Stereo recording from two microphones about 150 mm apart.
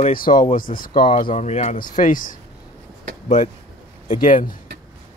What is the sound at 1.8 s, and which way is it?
Speech, 65° left (ahead or behind).